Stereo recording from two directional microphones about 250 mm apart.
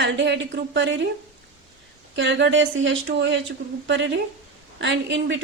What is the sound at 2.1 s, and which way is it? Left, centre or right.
A woman's voice, right.